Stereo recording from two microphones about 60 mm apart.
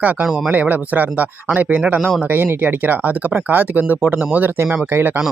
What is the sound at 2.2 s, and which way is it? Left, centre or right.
Speech, right.